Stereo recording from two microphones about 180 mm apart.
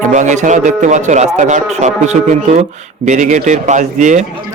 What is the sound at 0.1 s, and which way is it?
Speech, 40° right (ahead or behind).